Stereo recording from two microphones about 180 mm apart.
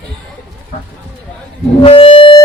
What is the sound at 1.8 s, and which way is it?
Harmonica, 30° left (ahead or behind).